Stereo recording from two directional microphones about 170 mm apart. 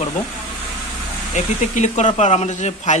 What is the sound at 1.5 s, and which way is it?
Speech, 45° left (ahead or behind).